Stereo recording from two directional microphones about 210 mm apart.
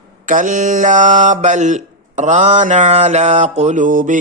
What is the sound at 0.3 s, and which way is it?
Mantra, 40° right (ahead or behind).